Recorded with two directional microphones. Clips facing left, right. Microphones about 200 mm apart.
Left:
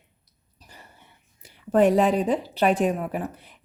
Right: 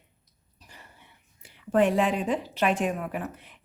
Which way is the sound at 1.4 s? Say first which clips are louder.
Left 4 dB; 40° left (ahead or behind).